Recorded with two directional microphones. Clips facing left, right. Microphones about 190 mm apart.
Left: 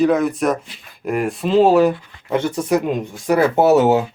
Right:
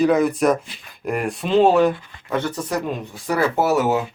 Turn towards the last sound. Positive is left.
turn(degrees=25)  # may be behind; listen again after turning